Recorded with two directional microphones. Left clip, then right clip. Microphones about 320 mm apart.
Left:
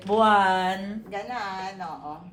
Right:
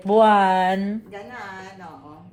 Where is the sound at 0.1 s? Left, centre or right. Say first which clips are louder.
Right 4 dB; right.